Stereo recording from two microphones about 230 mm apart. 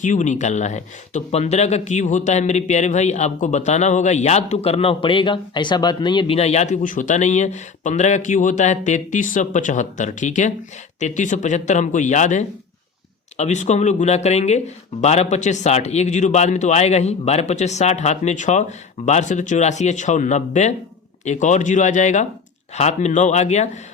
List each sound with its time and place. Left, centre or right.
0.0 s a man's voice: left